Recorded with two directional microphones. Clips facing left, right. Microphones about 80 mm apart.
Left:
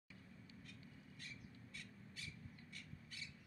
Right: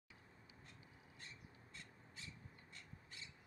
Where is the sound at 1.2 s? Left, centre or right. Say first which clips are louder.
Left 2 dB; right.